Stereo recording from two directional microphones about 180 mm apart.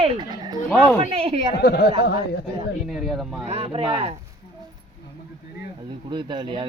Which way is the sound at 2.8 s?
Centre (ahead or behind).